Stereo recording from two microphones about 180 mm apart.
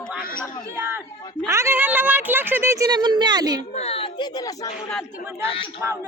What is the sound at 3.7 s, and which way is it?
A woman's voice, 35° left (ahead or behind).